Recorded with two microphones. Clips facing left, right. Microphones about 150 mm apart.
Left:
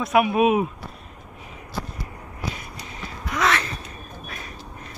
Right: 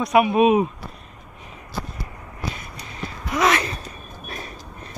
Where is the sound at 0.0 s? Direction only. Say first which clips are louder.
Right 2 dB; centre (ahead or behind).